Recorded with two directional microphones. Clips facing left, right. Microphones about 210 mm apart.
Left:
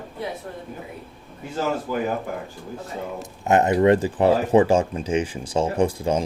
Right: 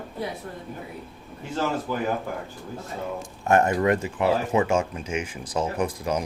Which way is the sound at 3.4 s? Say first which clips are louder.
Left 4 dB; 20° left (ahead or behind).